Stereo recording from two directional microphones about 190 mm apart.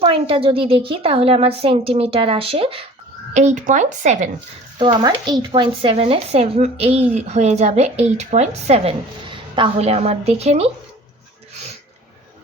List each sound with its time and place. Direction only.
0.0 s a woman's voice: 30° right (ahead or behind)
3.3 s a woman's voice: 40° right (ahead or behind)
4.9 s a woman's voice: 20° right (ahead or behind)